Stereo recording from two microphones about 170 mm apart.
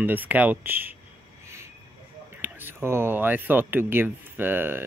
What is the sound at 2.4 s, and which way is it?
Speech, 10° right (ahead or behind).